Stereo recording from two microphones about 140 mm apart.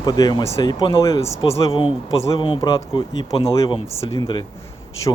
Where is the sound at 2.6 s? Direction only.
35° left (ahead or behind).